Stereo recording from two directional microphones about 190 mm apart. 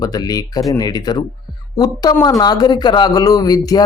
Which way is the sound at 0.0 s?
20° left (ahead or behind).